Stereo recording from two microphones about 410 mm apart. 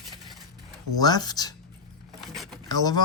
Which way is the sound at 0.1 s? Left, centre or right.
Centre.